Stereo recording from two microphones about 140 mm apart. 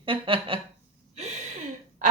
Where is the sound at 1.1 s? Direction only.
50° right (ahead or behind).